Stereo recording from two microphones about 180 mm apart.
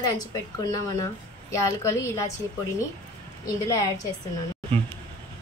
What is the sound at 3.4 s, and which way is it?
Speech, 20° left (ahead or behind).